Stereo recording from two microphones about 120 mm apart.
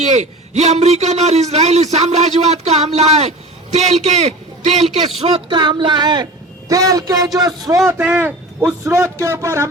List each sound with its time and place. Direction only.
0.2 s a man's voice: 70° right (ahead or behind)
5.2 s a man's voice: 40° right (ahead or behind)
7.9 s a man's voice: 15° right (ahead or behind)